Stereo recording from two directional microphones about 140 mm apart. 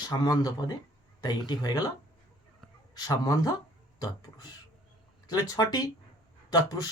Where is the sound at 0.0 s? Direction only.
30° left (ahead or behind).